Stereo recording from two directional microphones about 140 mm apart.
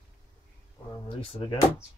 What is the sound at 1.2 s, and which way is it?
Speech, 40° left (ahead or behind).